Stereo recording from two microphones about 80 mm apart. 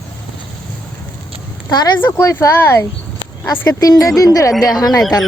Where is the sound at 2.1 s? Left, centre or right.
Left.